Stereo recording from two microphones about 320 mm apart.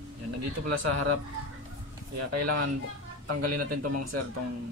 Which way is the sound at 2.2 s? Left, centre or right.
Right.